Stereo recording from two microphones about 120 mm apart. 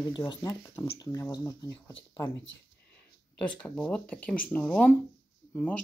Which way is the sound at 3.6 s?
10° left (ahead or behind).